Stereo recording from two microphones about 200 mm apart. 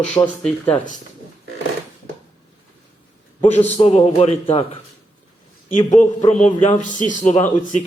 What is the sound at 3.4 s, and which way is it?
A man's voice, 30° left (ahead or behind).